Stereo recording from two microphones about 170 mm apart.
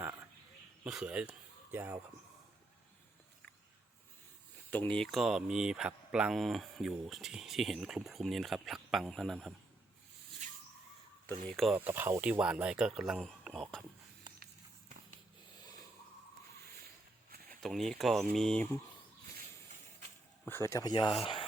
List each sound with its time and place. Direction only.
0.9 s speech: 5° right (ahead or behind)
4.7 s speech: 10° left (ahead or behind)
10.4 s a sound: 45° right (ahead or behind)
11.4 s speech: centre (ahead or behind)
11.9 s speech: 15° right (ahead or behind); by 13.8 s 5° left (ahead or behind)
17.6 s speech: centre (ahead or behind)
20.5 s speech: 15° left (ahead or behind)